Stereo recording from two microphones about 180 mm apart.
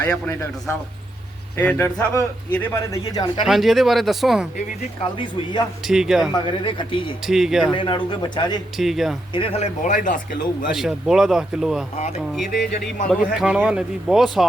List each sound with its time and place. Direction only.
0.0 s a man's voice: 10° left (ahead or behind)
3.4 s speech: centre (ahead or behind)
5.1 s a man's voice: 25° left (ahead or behind)
5.9 s speech: centre (ahead or behind)
6.3 s a man's voice: 25° left (ahead or behind)
7.3 s speech: centre (ahead or behind)
7.7 s a man's voice: 25° left (ahead or behind)
8.8 s speech: centre (ahead or behind)
9.3 s speech: 30° left (ahead or behind); by 10.2 s 45° left (ahead or behind)
10.7 s speech: centre (ahead or behind)
13.1 s speech: centre (ahead or behind)